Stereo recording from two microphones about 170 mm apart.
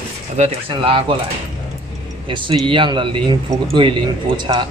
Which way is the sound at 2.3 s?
30° right (ahead or behind).